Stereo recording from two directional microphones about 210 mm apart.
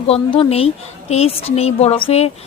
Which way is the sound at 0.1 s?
30° left (ahead or behind).